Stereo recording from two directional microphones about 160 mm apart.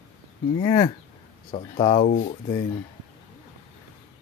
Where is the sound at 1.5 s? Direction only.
35° left (ahead or behind).